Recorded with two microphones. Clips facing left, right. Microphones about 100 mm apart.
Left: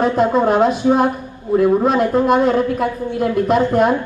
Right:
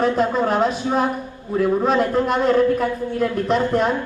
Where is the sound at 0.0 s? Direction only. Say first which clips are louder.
Left 3 dB; 5° left (ahead or behind).